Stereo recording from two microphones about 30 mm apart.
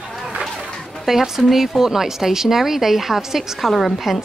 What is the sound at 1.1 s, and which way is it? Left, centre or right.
A woman's voice, centre.